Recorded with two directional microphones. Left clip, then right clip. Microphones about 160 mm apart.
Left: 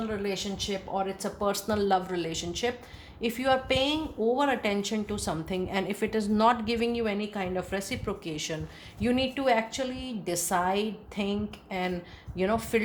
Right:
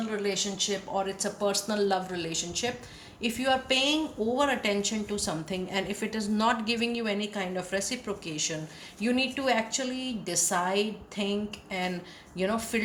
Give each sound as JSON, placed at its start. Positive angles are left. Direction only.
{"t": 0.3, "sound": "a woman's voice", "side_deg": 50}